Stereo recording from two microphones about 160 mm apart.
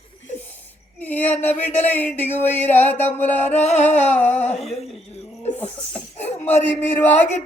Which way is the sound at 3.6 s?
45° left (ahead or behind).